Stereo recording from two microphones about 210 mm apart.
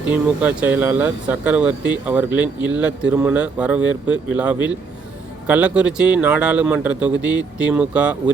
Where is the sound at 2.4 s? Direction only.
20° left (ahead or behind).